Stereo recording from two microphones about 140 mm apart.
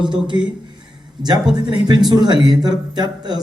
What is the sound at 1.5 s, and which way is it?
A man's voice, 30° right (ahead or behind).